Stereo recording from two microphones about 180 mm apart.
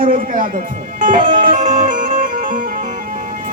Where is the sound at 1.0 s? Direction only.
45° right (ahead or behind).